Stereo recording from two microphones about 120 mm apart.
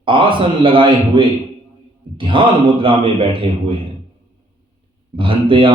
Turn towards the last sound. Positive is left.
turn(degrees=-45)  # may be behind; listen again after turning